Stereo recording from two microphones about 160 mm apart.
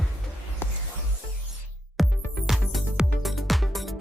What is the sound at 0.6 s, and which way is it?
Music, 10° left (ahead or behind).